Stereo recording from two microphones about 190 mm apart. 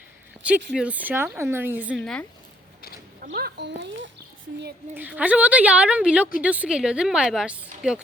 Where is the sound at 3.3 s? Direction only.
60° right (ahead or behind).